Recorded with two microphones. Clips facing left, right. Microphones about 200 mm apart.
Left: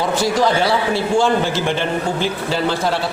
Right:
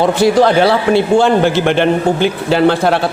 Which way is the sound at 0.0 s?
60° right (ahead or behind).